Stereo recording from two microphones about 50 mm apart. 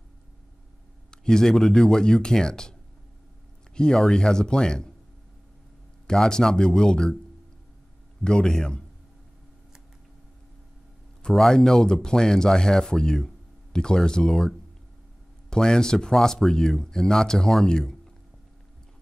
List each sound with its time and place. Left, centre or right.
1.1 s speech: centre
3.7 s speech: centre
6.0 s speech: centre
8.2 s speech: centre
11.2 s speech: centre
15.5 s speech: centre